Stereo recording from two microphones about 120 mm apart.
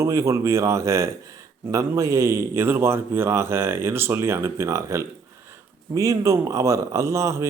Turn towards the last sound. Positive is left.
turn(degrees=-25)  # may be behind; listen again after turning